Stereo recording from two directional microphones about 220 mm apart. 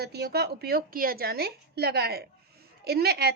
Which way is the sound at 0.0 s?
45° right (ahead or behind).